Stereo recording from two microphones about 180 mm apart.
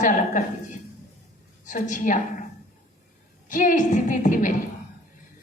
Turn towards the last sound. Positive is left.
turn(degrees=45)  # may be behind; listen again after turning